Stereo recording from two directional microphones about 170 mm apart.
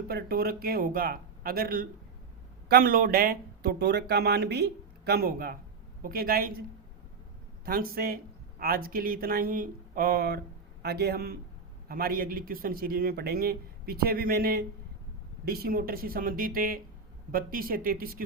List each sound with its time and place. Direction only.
0.1 s speech: 65° right (ahead or behind)
7.6 s speech: 60° right (ahead or behind)